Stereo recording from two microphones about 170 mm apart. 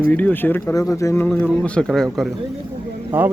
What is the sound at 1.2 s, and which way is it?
Speech, 5° left (ahead or behind).